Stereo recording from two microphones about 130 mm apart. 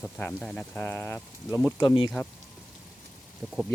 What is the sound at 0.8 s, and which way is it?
Speech, 15° left (ahead or behind).